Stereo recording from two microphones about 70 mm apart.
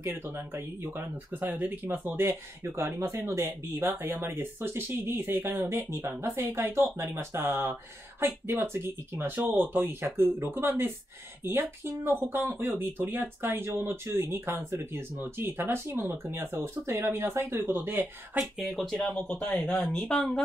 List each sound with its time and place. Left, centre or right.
0.0 s speech: right
18.4 s speech: centre
19.8 s speech: centre